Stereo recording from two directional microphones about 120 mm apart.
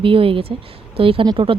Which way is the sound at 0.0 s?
50° right (ahead or behind).